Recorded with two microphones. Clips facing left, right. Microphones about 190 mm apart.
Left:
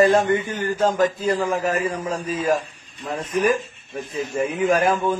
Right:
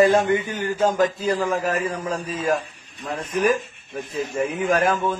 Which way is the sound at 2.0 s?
5° left (ahead or behind).